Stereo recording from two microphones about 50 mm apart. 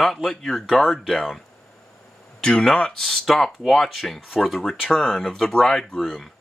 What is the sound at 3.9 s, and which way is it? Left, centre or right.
Speech, centre.